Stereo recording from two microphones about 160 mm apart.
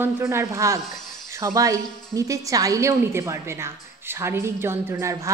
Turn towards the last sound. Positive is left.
turn(degrees=-15)  # may be behind; listen again after turning